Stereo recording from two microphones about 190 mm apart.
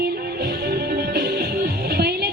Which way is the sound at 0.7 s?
55° right (ahead or behind).